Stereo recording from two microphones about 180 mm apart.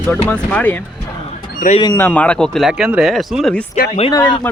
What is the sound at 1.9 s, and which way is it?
Speech, 10° left (ahead or behind).